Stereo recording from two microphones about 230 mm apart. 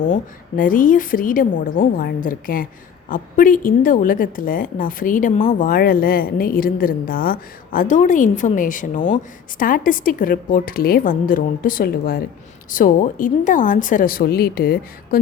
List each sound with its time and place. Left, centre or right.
0.1 s a woman's voice: left